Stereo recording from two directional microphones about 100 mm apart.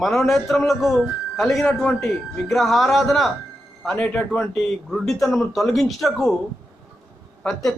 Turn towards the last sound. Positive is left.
turn(degrees=5)  # may be behind; listen again after turning